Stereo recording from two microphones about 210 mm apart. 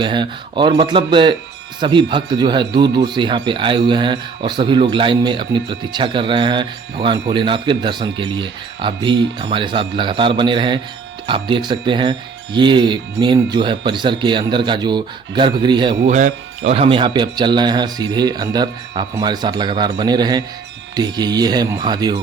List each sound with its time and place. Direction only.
0.0 s speech: 20° right (ahead or behind)
16.1 s speech: 35° right (ahead or behind)